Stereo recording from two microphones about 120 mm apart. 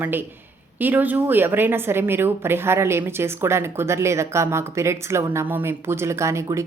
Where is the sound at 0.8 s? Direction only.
15° right (ahead or behind).